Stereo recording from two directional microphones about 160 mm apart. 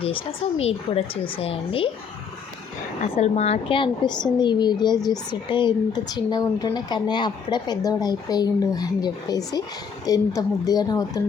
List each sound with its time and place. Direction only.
0.0 s speech: 35° left (ahead or behind)
3.2 s speech: 40° left (ahead or behind); by 11.2 s 25° left (ahead or behind)